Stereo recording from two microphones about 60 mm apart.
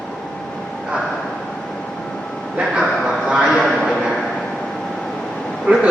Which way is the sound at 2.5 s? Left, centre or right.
Centre.